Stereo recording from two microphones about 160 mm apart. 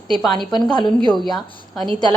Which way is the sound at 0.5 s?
25° left (ahead or behind).